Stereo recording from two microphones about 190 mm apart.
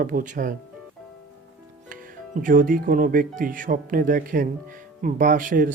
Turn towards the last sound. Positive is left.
turn(degrees=-45)  # may be behind; listen again after turning